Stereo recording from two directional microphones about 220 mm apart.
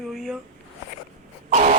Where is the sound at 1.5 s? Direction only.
35° right (ahead or behind).